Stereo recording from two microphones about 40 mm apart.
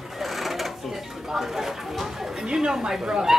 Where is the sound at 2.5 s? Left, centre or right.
Centre.